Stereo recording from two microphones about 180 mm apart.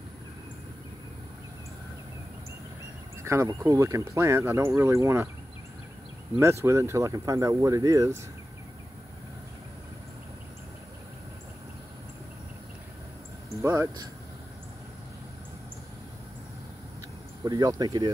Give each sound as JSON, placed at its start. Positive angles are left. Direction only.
{"t": 3.3, "sound": "speech", "side_deg": -15}
{"t": 6.3, "sound": "speech", "side_deg": -15}
{"t": 13.6, "sound": "speech", "side_deg": -15}
{"t": 17.5, "sound": "speech", "side_deg": -20}